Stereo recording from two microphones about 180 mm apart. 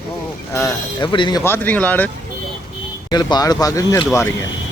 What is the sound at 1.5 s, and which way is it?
Speech, 10° left (ahead or behind).